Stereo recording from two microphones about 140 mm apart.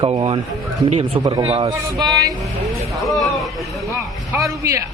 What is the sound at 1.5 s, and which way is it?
Speech, 45° right (ahead or behind).